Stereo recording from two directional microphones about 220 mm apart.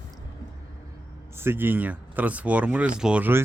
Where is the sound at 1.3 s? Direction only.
10° right (ahead or behind).